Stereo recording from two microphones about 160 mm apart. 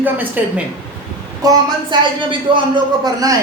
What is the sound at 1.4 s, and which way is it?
A woman's voice, 25° right (ahead or behind).